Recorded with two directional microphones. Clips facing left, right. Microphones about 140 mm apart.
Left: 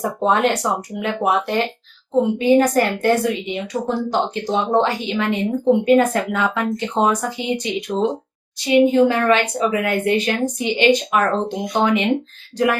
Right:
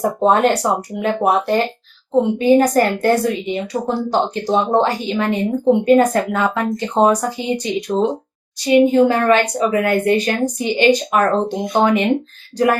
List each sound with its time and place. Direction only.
0.0 s a woman's voice: 40° right (ahead or behind)